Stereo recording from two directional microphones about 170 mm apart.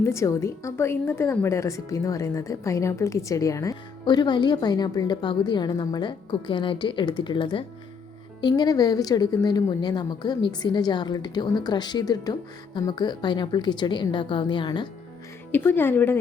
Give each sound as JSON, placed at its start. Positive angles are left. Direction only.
{"t": 0.0, "sound": "speech", "side_deg": 15}
{"t": 15.5, "sound": "speech", "side_deg": 10}